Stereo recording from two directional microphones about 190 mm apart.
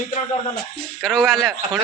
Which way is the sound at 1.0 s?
Centre (ahead or behind).